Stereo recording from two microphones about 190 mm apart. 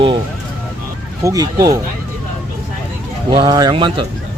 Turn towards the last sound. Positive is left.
turn(degrees=-25)  # may be behind; listen again after turning